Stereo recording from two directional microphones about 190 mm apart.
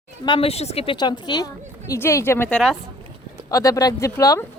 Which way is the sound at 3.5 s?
15° left (ahead or behind).